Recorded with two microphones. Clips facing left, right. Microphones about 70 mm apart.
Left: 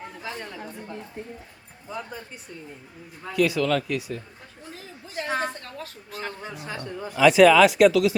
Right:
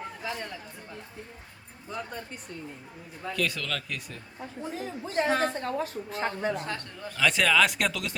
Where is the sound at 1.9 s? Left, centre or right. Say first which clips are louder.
Left 1 dB; centre.